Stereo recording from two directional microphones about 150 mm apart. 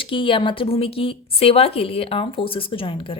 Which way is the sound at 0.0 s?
35° left (ahead or behind).